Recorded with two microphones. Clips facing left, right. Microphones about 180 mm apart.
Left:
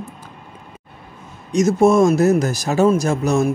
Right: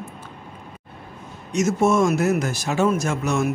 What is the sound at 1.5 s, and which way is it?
A man's voice, 35° left (ahead or behind).